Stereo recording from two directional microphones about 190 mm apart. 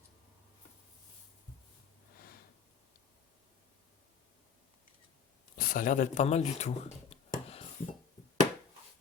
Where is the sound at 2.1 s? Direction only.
50° left (ahead or behind).